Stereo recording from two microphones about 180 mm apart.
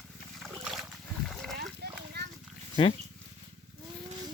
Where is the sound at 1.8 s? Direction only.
60° right (ahead or behind).